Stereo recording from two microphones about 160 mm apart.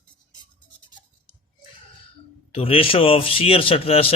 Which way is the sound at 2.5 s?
35° left (ahead or behind).